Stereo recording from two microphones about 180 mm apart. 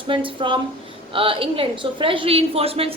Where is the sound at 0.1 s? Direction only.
30° right (ahead or behind).